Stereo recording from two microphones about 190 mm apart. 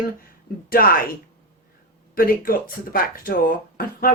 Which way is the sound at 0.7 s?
50° left (ahead or behind).